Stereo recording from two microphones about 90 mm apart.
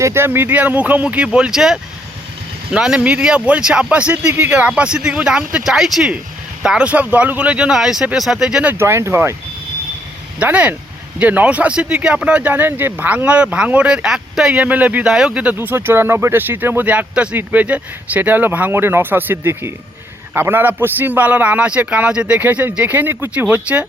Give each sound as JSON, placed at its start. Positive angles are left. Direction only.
{"t": 0.0, "sound": "speech", "side_deg": -30}
{"t": 8.8, "sound": "speech", "side_deg": -30}
{"t": 10.4, "sound": "speech", "side_deg": -15}
{"t": 15.5, "sound": "speech", "side_deg": -25}